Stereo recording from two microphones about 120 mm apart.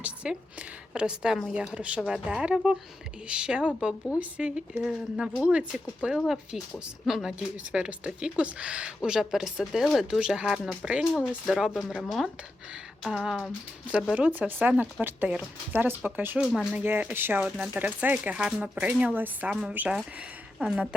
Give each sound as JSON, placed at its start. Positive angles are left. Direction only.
{"t": 0.0, "sound": "a woman's voice", "side_deg": -10}